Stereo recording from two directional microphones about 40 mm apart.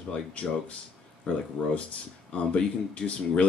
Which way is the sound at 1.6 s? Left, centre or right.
Left.